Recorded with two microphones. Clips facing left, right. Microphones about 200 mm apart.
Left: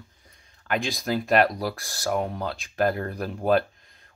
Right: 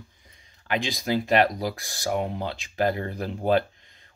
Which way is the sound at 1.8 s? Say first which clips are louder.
Left 1 dB; 15° right (ahead or behind).